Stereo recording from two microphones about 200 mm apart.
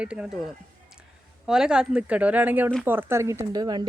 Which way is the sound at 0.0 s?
5° right (ahead or behind).